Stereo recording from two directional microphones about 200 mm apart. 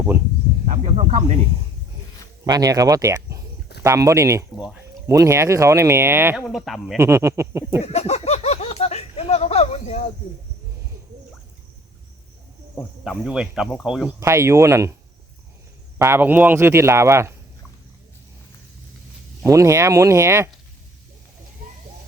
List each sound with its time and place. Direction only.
0.6 s speech: 35° right (ahead or behind)
2.4 s speech: 15° right (ahead or behind)
4.5 s speech: 5° right (ahead or behind)
5.0 s speech: 15° right (ahead or behind)
6.5 s speech: centre (ahead or behind)
6.9 s speech: 15° right (ahead or behind)
7.9 s a sound: 35° left (ahead or behind)
12.7 s speech: 5° right (ahead or behind)
14.2 s speech: 15° right (ahead or behind)
16.0 s speech: 10° right (ahead or behind)
19.5 s speech: 15° right (ahead or behind)